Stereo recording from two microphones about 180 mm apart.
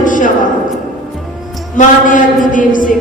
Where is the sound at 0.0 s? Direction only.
45° left (ahead or behind).